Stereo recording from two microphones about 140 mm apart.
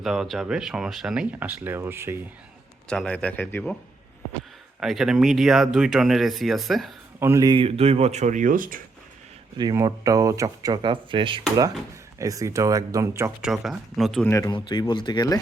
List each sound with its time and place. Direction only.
0.0 s speech: centre (ahead or behind)
2.9 s a man's voice: 5° left (ahead or behind)
4.8 s speech: 5° right (ahead or behind)
7.2 s speech: 20° right (ahead or behind)
7.6 s speech: 45° right (ahead or behind); by 8.8 s 75° right (ahead or behind)
9.6 s speech: 25° right (ahead or behind)
12.2 s speech: 25° right (ahead or behind)
13.4 s speech: 5° right (ahead or behind)
14.3 s speech: 20° left (ahead or behind)
14.5 s speech: 35° left (ahead or behind)